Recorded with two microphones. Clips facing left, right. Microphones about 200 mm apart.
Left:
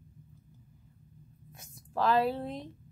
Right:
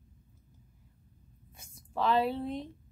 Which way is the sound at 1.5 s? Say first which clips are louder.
Left 2 dB; centre (ahead or behind).